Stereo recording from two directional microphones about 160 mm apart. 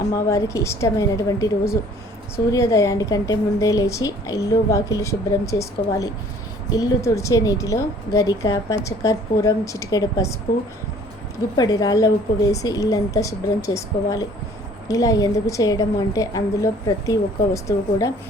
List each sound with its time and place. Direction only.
0.3 s a woman's voice: 20° left (ahead or behind)
11.5 s a woman's voice: 25° left (ahead or behind)